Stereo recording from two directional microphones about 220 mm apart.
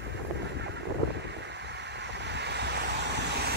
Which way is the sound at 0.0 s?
50° right (ahead or behind).